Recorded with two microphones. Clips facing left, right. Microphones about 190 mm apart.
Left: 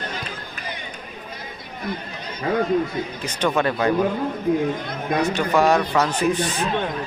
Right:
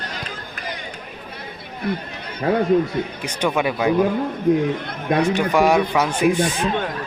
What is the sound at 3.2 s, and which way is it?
Speech, 10° right (ahead or behind).